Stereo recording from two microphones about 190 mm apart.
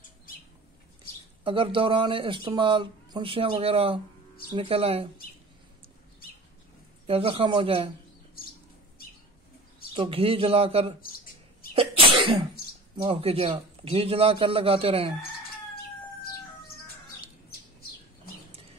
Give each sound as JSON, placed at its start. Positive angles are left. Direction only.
{"t": 1.4, "sound": "speech", "side_deg": -25}
{"t": 7.1, "sound": "speech", "side_deg": -30}
{"t": 9.9, "sound": "speech", "side_deg": -30}
{"t": 11.7, "sound": "cough", "side_deg": -30}
{"t": 12.9, "sound": "speech", "side_deg": -30}